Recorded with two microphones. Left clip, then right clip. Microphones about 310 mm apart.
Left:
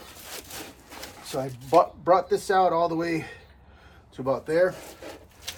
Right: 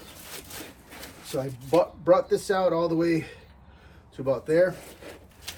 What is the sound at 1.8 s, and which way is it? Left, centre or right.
Speech, centre.